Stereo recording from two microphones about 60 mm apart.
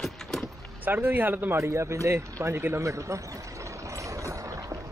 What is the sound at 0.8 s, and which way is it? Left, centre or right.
Speech, right.